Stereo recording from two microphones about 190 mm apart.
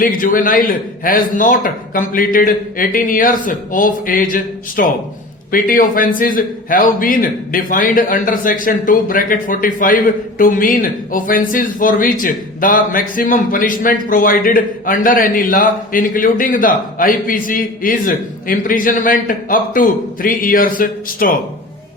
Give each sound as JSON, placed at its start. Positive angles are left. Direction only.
{"t": 0.0, "sound": "a man's voice", "side_deg": 45}